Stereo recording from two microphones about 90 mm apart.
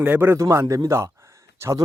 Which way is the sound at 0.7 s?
30° right (ahead or behind).